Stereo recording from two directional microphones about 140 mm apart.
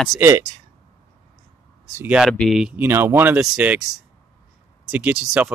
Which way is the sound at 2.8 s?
15° right (ahead or behind).